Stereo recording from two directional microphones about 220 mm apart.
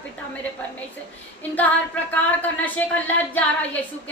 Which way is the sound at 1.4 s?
5° left (ahead or behind).